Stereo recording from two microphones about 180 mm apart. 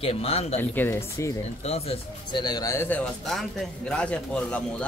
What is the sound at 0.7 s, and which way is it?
Speech, 10° left (ahead or behind).